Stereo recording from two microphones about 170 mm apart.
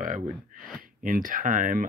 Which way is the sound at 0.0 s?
50° right (ahead or behind).